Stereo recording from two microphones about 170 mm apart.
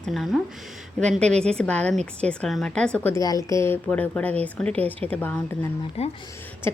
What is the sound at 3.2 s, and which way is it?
A woman's voice, 20° left (ahead or behind).